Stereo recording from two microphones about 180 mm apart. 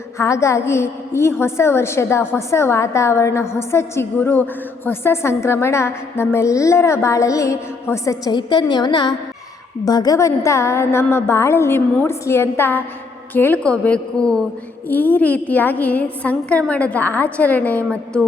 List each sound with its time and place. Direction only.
0.2 s a woman's voice: 15° left (ahead or behind)